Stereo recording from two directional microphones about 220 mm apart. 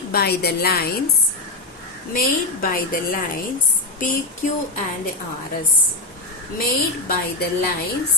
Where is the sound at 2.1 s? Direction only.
40° left (ahead or behind).